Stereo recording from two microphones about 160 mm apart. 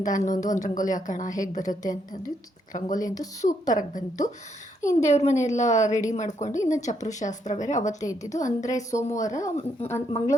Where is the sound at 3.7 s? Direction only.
55° left (ahead or behind).